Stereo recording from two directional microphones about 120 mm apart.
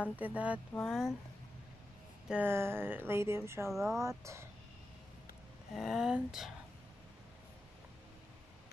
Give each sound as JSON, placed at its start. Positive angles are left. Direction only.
{"t": 0.0, "sound": "speech", "side_deg": -15}
{"t": 2.2, "sound": "a sound", "side_deg": -10}
{"t": 2.5, "sound": "speech", "side_deg": -20}
{"t": 5.8, "sound": "speech", "side_deg": -5}